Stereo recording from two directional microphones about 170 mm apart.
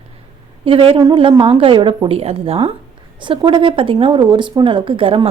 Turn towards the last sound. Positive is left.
turn(degrees=-35)  # may be behind; listen again after turning